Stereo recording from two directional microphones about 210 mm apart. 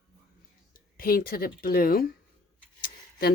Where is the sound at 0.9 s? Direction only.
45° left (ahead or behind).